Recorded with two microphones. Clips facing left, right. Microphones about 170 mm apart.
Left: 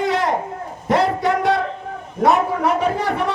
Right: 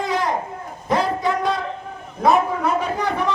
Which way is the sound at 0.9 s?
70° left (ahead or behind).